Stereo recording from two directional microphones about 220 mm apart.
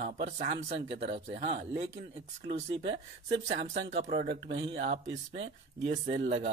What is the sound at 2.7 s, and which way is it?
Speech, 55° right (ahead or behind).